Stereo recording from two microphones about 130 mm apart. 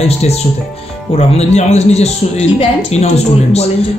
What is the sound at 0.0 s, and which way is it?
Speech, 55° left (ahead or behind).